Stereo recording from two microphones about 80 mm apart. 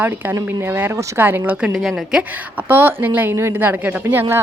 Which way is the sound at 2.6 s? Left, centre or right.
Right.